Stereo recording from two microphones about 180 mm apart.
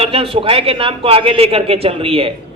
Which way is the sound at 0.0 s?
30° right (ahead or behind).